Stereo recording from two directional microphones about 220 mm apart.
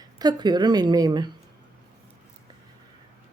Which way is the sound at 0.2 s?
20° right (ahead or behind).